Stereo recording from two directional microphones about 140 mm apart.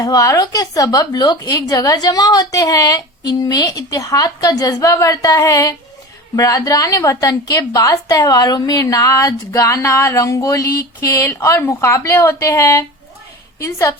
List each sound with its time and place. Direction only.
0.0 s a woman's voice: 25° left (ahead or behind)